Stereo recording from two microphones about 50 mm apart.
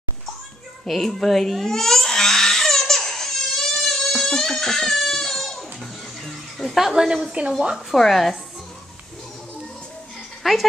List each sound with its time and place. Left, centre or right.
0.8 s a sound: centre
4.1 s crying: centre
5.8 s music: centre
7.4 s a woman's voice: right
8.0 s speech: centre
10.4 s speech: centre